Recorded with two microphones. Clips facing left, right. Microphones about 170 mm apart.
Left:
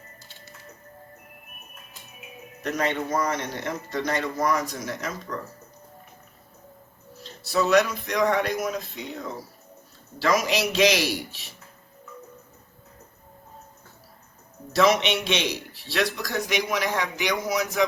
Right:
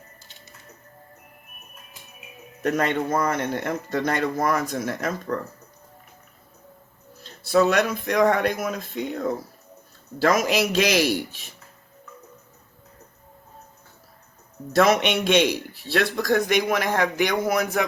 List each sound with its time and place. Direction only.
2.6 s a man's voice: 50° right (ahead or behind)
7.2 s a man's voice: 50° right (ahead or behind)
14.7 s a man's voice: 50° right (ahead or behind)